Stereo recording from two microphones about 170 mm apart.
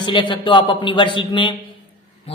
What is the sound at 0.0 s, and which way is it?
A man's voice, 30° left (ahead or behind).